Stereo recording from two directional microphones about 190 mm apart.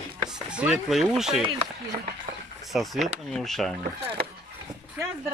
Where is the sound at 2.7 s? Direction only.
Centre (ahead or behind).